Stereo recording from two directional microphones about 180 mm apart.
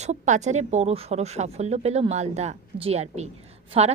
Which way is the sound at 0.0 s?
40° right (ahead or behind).